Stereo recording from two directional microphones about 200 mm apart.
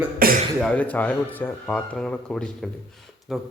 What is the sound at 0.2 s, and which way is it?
Throat clearing, 45° right (ahead or behind).